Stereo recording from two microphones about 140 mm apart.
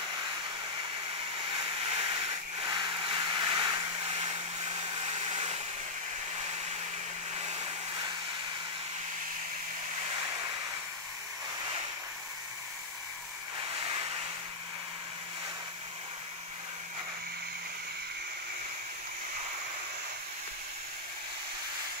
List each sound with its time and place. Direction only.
1.9 s vehicle: 40° right (ahead or behind)
7.3 s vehicle: 45° right (ahead or behind)